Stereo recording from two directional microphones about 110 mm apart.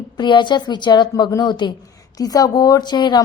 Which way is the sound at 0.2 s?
45° left (ahead or behind).